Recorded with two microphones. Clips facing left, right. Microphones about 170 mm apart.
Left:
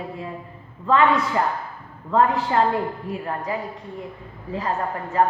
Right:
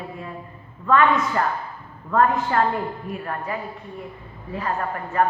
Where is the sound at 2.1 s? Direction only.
20° left (ahead or behind).